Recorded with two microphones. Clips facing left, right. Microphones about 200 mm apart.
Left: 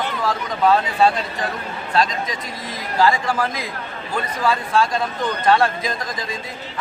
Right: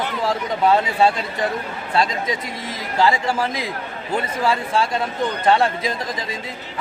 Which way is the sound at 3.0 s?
25° right (ahead or behind).